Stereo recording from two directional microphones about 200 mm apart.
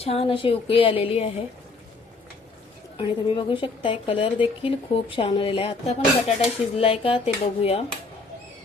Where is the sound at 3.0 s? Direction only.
25° left (ahead or behind).